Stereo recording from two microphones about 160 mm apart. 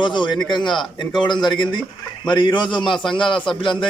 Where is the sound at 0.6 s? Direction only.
Centre (ahead or behind).